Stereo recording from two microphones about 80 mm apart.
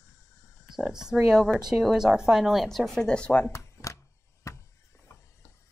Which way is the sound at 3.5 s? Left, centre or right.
Left.